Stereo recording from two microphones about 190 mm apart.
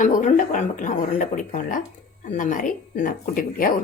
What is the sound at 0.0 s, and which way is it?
Speech, 40° left (ahead or behind).